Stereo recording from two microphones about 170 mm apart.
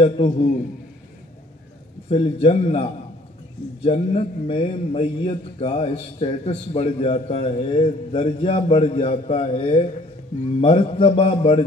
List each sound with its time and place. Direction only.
0.0 s a man's voice: 35° left (ahead or behind)
2.0 s a man's voice: 35° left (ahead or behind)